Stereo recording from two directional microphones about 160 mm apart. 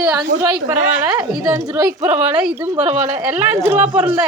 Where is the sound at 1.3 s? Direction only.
20° right (ahead or behind).